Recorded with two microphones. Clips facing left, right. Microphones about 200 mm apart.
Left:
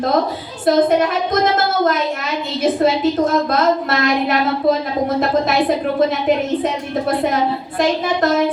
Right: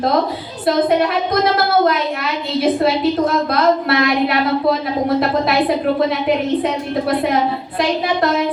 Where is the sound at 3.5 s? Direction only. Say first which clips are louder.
Right 1 dB; 45° left (ahead or behind).